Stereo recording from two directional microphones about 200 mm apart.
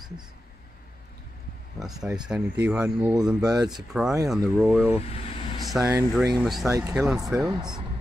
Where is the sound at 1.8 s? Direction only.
5° right (ahead or behind).